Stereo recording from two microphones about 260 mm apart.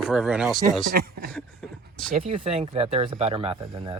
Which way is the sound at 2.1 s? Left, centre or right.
Right.